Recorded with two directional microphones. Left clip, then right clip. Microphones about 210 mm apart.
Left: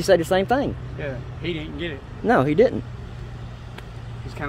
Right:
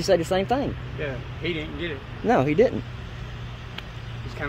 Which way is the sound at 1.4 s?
50° left (ahead or behind).